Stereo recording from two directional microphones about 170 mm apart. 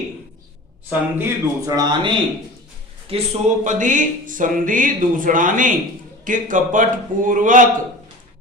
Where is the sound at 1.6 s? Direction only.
25° right (ahead or behind).